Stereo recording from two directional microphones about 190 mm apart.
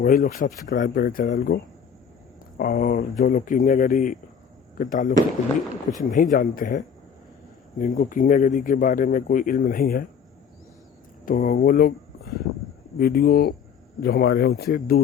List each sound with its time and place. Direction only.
0.0 s speech: 45° left (ahead or behind)
2.6 s speech: 50° left (ahead or behind)
11.3 s speech: 45° left (ahead or behind)
13.0 s speech: 50° left (ahead or behind)